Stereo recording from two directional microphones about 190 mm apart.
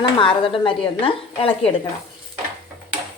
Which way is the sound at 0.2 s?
30° left (ahead or behind).